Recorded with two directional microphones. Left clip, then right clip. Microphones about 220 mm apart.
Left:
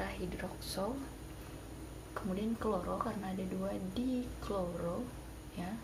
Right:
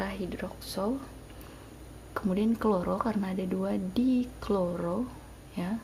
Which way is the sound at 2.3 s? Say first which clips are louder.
Right 8 dB; 45° right (ahead or behind).